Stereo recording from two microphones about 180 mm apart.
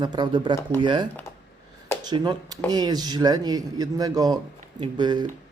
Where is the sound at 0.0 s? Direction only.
25° right (ahead or behind).